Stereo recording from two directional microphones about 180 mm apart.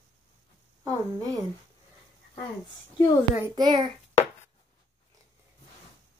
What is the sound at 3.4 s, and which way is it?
Speech, 20° right (ahead or behind).